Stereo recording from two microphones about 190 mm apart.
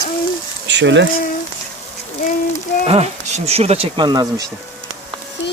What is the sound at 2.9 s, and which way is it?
Speech, 35° right (ahead or behind).